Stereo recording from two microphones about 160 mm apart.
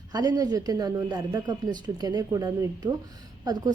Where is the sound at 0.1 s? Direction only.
25° right (ahead or behind).